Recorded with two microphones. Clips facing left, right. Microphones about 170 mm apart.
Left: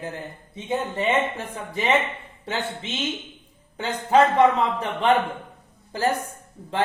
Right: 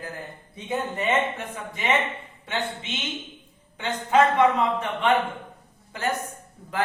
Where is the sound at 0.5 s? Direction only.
25° left (ahead or behind).